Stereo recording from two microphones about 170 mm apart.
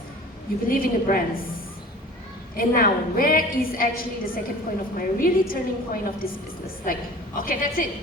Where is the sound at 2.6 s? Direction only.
60° left (ahead or behind).